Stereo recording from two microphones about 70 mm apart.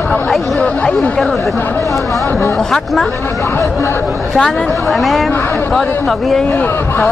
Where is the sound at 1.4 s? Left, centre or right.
Left.